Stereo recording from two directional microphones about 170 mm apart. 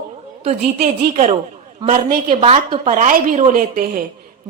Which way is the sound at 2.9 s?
55° right (ahead or behind).